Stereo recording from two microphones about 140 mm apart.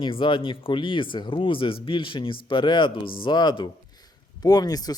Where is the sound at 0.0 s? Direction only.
35° left (ahead or behind).